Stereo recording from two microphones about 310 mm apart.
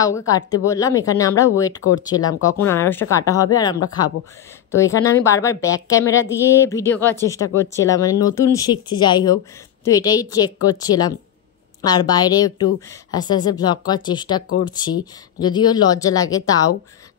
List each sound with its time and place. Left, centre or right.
0.0 s speech: centre